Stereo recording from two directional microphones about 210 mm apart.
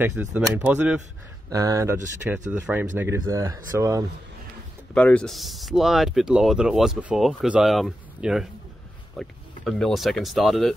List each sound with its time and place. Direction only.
0.0 s speech: 10° right (ahead or behind)
4.9 s speech: 5° left (ahead or behind)